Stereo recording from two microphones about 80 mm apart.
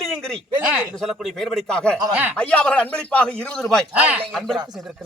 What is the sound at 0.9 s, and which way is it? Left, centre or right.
A man's voice, centre.